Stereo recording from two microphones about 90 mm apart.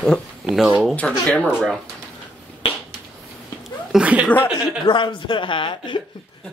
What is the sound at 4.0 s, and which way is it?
Speech, 15° right (ahead or behind).